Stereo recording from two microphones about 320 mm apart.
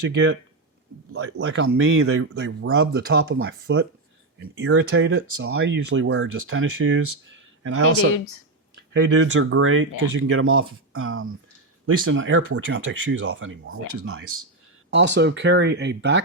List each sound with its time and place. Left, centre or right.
1.1 s speech: right